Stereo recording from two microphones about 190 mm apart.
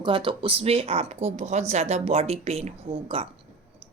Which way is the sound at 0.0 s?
25° right (ahead or behind).